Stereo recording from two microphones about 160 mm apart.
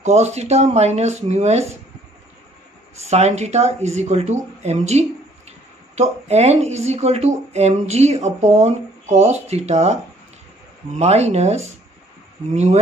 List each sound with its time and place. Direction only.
0.0 s speech: 45° right (ahead or behind)
3.0 s speech: 45° right (ahead or behind)
11.0 s speech: 45° right (ahead or behind)